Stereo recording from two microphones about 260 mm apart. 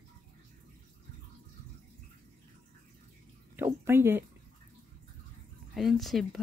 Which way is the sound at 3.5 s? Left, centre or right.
Centre.